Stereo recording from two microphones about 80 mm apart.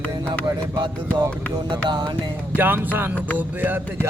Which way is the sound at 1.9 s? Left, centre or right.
Right.